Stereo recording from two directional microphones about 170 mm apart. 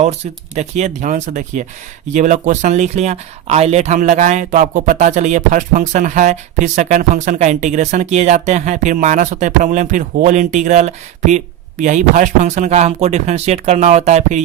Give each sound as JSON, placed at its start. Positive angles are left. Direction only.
{"t": 0.0, "sound": "speech", "side_deg": -40}